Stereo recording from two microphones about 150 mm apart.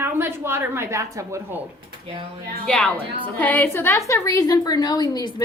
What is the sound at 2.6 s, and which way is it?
A woman's voice, 5° left (ahead or behind).